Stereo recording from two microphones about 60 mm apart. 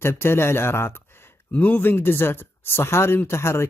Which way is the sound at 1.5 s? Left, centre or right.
Left.